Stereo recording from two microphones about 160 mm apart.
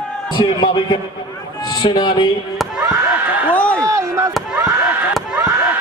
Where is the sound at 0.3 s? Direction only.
30° left (ahead or behind).